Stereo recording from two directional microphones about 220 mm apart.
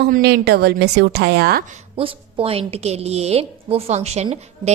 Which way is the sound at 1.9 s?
25° right (ahead or behind).